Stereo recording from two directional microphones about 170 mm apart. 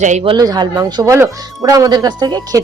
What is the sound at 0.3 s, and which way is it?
Speech, 25° right (ahead or behind).